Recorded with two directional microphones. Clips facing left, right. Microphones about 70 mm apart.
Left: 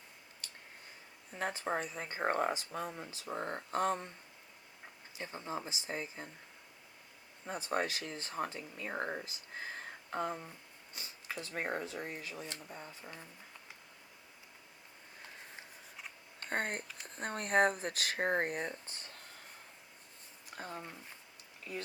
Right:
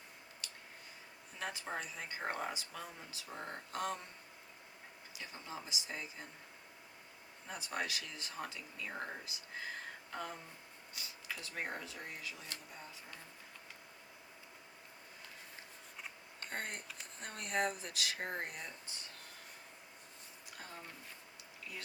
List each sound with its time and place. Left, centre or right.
0.4 s a sound: left
1.4 s speech: left
5.1 s speech: left
7.4 s speech: left
10.1 s a sound: left
10.9 s speech: left
16.5 s speech: left
20.6 s speech: left